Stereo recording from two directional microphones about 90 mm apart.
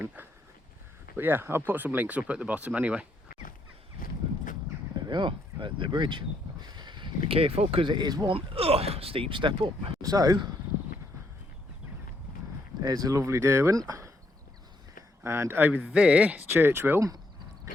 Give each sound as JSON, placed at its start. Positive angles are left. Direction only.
{"t": 1.1, "sound": "speech", "side_deg": -25}
{"t": 4.9, "sound": "speech", "side_deg": -55}
{"t": 7.9, "sound": "speech", "side_deg": -50}
{"t": 8.3, "sound": "speech", "side_deg": -90}
{"t": 10.0, "sound": "speech", "side_deg": -45}
{"t": 12.8, "sound": "speech", "side_deg": -45}
{"t": 15.2, "sound": "speech", "side_deg": -30}